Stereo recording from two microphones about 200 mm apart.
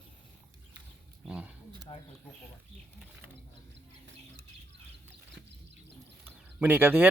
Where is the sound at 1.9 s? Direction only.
20° left (ahead or behind).